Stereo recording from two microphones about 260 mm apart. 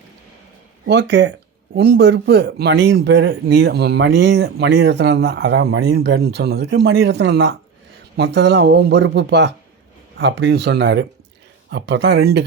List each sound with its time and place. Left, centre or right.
0.9 s speech: right